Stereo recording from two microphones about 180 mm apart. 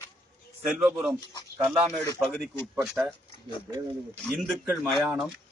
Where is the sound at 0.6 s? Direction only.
5° right (ahead or behind).